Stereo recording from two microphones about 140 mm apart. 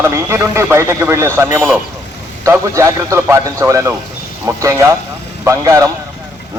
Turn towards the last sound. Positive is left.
turn(degrees=-25)  # may be behind; listen again after turning